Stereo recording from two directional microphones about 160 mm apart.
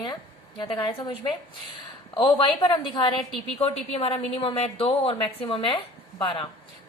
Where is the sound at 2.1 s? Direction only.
30° left (ahead or behind).